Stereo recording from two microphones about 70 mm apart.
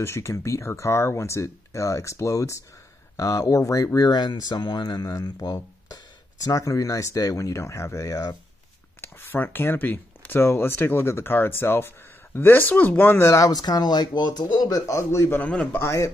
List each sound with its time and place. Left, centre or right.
0.0 s speech: left
6.4 s speech: left
9.0 s speech: left
13.4 s speech: left
15.4 s a man's voice: centre
15.8 s speech: left